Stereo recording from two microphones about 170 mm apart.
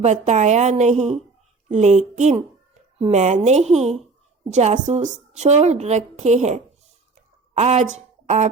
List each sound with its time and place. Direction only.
0.0 s a woman's voice: 45° right (ahead or behind)